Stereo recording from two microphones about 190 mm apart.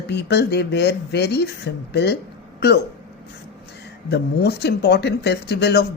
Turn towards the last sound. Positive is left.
turn(degrees=60)  # may be behind; listen again after turning